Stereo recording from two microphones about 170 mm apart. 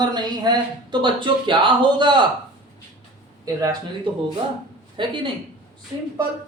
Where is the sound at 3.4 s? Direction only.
20° right (ahead or behind).